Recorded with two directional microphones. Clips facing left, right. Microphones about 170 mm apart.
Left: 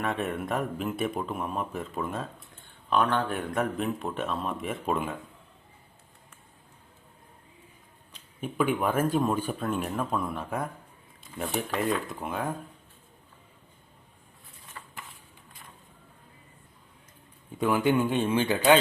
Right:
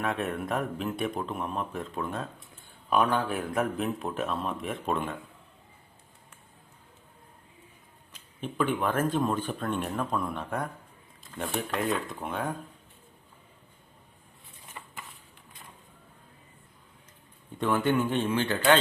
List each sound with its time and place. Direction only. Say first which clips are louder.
0.0 s speech: even; centre (ahead or behind)
8.4 s speech: left 1 dB; 10° left (ahead or behind)
11.2 s a sound: left 1 dB; centre (ahead or behind)
11.7 s speech: left 1 dB; centre (ahead or behind)
14.8 s a sound: right 1 dB; 20° right (ahead or behind)
17.6 s a man's voice: left 2 dB; 10° left (ahead or behind)